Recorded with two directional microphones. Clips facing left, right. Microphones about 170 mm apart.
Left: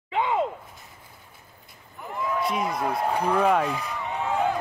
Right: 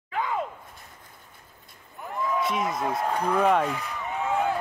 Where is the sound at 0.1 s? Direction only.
25° left (ahead or behind).